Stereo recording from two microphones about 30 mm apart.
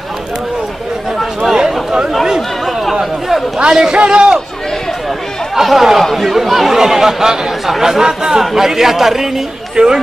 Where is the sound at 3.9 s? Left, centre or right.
Right.